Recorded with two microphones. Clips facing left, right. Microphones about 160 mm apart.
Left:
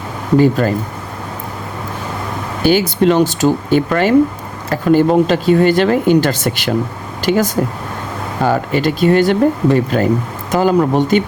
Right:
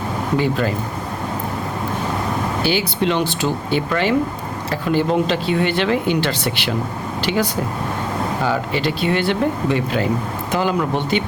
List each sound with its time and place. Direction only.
0.3 s speech: 45° left (ahead or behind)
2.6 s speech: 45° left (ahead or behind)